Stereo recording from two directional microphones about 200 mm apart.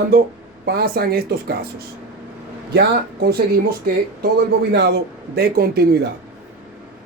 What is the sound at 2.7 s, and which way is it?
Speech, 50° right (ahead or behind).